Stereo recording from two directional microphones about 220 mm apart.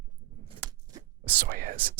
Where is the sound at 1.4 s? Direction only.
40° right (ahead or behind).